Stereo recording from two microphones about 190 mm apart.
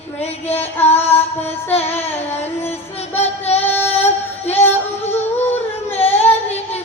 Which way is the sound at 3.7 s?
10° left (ahead or behind).